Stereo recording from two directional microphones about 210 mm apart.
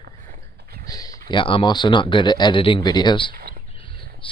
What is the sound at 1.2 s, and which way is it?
Speech, 25° left (ahead or behind).